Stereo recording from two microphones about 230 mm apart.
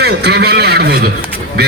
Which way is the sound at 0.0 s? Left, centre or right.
Right.